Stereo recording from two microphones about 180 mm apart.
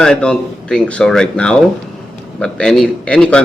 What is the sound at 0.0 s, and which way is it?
A man's voice, 5° left (ahead or behind).